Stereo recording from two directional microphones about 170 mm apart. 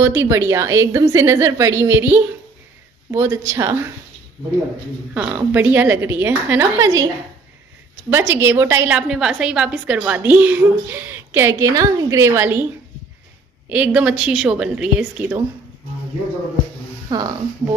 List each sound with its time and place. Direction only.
0.0 s a woman's voice: 15° right (ahead or behind)
5.1 s a woman's voice: 5° right (ahead or behind)
8.1 s a woman's voice: 10° right (ahead or behind)
13.7 s a woman's voice: 5° right (ahead or behind)
17.1 s speech: 25° right (ahead or behind)